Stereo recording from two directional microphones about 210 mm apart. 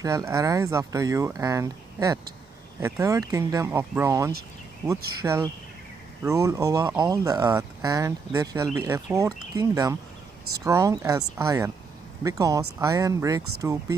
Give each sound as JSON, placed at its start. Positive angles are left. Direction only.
{"t": 0.0, "sound": "speech", "side_deg": -15}